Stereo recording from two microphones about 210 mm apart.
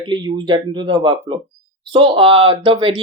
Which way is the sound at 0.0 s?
20° right (ahead or behind).